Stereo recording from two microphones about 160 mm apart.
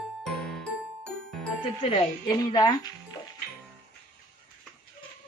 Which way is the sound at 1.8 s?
25° left (ahead or behind).